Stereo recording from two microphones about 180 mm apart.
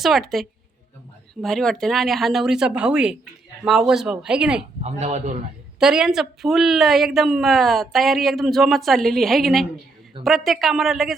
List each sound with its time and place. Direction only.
0.0 s speech: centre (ahead or behind)
4.8 s speech: 40° right (ahead or behind)
5.8 s speech: 5° right (ahead or behind)